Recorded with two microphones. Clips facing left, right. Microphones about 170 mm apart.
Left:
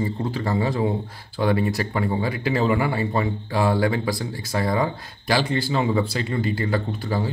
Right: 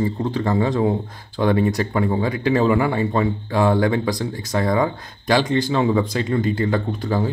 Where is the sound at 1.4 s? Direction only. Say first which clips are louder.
Right 3 dB; 45° right (ahead or behind).